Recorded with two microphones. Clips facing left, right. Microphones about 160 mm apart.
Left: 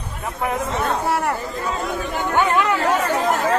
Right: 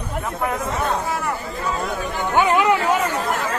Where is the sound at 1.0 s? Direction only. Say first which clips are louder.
Left 4 dB; 60° left (ahead or behind).